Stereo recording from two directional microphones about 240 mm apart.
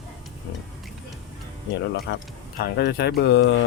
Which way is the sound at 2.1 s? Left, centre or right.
Left.